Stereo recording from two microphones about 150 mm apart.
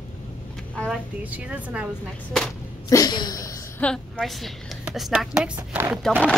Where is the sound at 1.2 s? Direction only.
10° right (ahead or behind).